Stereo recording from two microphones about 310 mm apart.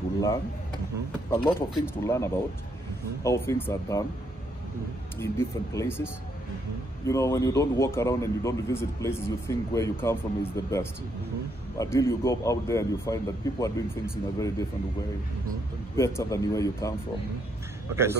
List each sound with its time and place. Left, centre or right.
1.3 s speech: centre
5.2 s speech: centre
7.1 s speech: centre
16.0 s speech: centre